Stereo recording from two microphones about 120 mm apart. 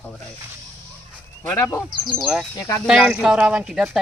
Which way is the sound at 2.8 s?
5° right (ahead or behind).